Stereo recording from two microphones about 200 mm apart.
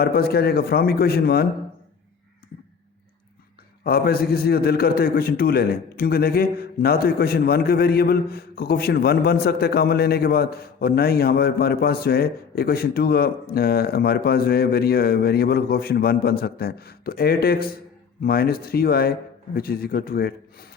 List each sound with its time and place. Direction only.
0.0 s a man's voice: 50° left (ahead or behind)
3.8 s a man's voice: 50° left (ahead or behind)